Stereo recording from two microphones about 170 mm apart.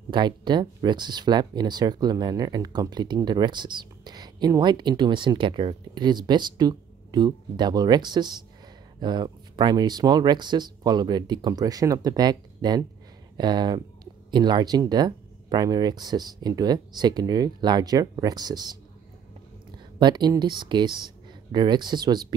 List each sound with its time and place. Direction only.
0.1 s speech: 25° right (ahead or behind)
20.0 s speech: 25° right (ahead or behind)